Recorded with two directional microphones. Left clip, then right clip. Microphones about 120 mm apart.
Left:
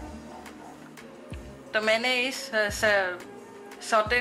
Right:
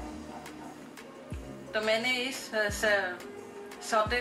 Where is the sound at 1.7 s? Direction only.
20° left (ahead or behind).